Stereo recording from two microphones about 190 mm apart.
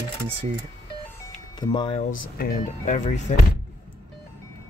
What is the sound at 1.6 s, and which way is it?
Speech, 25° left (ahead or behind).